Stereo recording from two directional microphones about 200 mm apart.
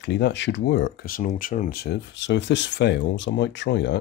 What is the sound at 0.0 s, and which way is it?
Speech, 60° left (ahead or behind).